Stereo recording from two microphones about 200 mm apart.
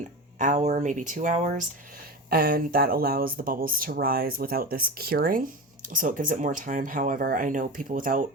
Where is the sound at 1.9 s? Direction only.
45° right (ahead or behind).